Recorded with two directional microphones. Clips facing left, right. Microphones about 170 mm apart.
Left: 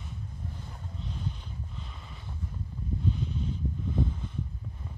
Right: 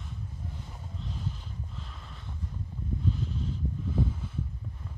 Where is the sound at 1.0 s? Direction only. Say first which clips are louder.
Even; centre (ahead or behind).